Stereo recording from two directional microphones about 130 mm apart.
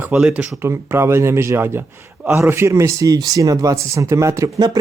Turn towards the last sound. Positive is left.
turn(degrees=-30)  # may be behind; listen again after turning